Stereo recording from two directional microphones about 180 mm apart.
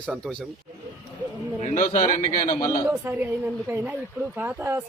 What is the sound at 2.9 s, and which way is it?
A man's voice, 10° right (ahead or behind).